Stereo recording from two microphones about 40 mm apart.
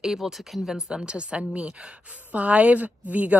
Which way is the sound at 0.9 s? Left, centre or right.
Right.